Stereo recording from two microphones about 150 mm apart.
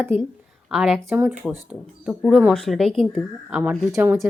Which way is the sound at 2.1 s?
Centre (ahead or behind).